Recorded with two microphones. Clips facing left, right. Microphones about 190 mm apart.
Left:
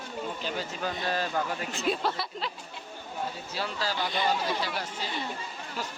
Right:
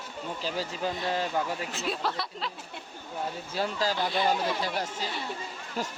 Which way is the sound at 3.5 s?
40° right (ahead or behind).